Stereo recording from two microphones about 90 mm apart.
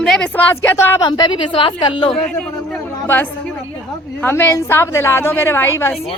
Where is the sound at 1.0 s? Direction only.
55° left (ahead or behind).